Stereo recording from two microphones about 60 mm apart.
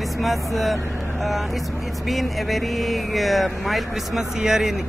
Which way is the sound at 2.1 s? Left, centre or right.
Centre.